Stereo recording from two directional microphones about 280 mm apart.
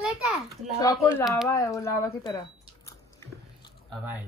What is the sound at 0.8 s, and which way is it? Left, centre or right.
Speech, centre.